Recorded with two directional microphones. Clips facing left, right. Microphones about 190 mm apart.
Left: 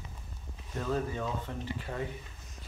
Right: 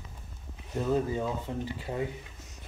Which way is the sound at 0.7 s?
15° right (ahead or behind).